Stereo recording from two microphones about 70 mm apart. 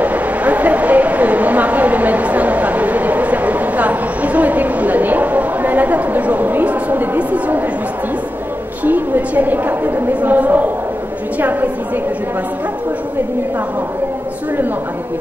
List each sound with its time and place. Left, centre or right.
0.0 s a woman's voice: right
8.8 s a woman's voice: right